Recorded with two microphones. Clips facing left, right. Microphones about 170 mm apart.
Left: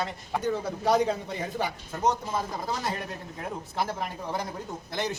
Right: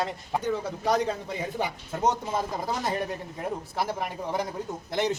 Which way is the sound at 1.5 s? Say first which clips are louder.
Right 1 dB; 15° right (ahead or behind).